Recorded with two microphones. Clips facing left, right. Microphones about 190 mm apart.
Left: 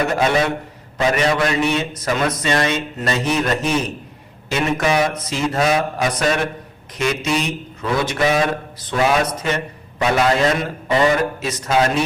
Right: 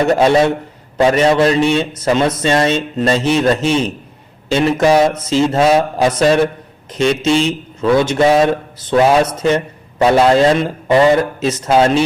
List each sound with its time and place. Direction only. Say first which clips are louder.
0.0 s a man's voice: right 6 dB; 30° right (ahead or behind)